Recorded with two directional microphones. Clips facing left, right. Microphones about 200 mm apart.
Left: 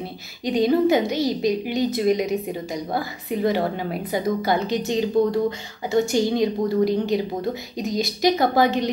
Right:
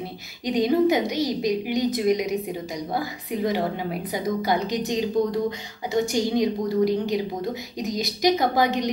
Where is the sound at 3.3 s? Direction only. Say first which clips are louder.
Left 3 dB; 25° left (ahead or behind).